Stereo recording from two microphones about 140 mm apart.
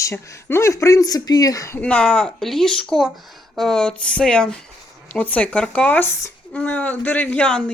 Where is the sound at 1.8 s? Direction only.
10° left (ahead or behind).